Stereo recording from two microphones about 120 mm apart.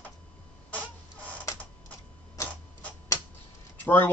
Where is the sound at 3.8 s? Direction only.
15° left (ahead or behind).